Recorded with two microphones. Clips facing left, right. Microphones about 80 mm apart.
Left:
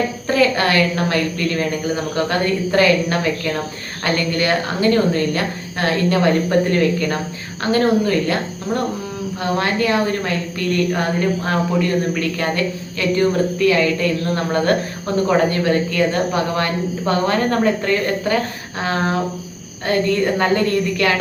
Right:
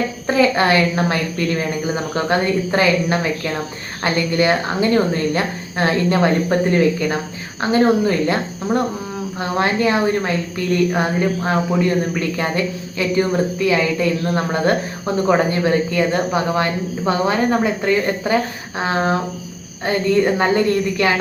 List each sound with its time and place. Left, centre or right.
0.3 s speech: right
1.2 s speech: centre
2.1 s speech: centre
8.7 s a sound: right
9.6 s speech: right